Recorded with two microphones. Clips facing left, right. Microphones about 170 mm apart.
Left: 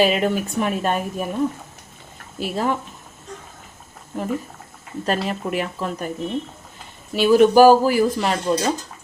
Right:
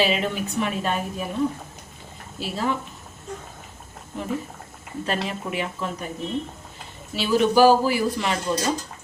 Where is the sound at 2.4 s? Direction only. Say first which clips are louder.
Left 4 dB; 50° left (ahead or behind).